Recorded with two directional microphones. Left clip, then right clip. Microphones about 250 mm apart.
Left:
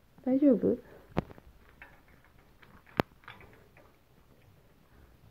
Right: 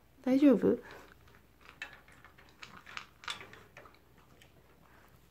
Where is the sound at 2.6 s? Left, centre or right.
Centre.